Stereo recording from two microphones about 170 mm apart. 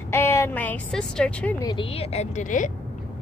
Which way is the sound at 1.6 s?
30° left (ahead or behind).